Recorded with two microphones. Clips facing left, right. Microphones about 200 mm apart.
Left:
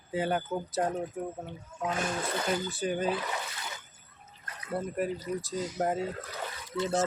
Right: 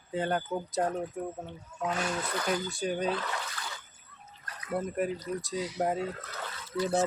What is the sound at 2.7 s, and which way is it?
Speech, 5° left (ahead or behind).